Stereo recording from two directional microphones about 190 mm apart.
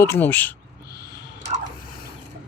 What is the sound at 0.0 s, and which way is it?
Speech, 10° left (ahead or behind).